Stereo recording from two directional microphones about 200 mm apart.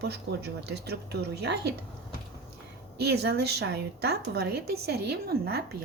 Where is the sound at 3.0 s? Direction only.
55° right (ahead or behind).